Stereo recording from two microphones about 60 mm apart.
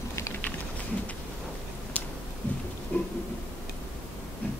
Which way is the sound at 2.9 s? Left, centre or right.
Left.